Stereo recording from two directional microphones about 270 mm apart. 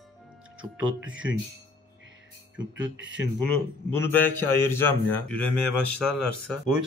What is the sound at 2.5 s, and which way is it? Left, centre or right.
Speech, right.